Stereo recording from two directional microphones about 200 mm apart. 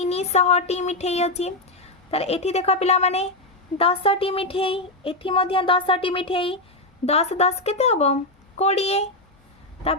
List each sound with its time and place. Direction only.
0.0 s speech: 35° left (ahead or behind)